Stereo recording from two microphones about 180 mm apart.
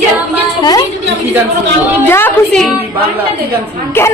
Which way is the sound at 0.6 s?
20° left (ahead or behind).